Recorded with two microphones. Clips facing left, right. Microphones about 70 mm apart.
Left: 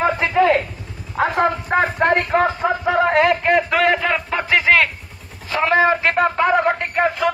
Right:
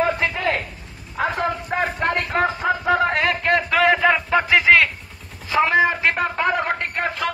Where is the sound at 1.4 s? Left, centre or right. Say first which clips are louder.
Left 5 dB; left.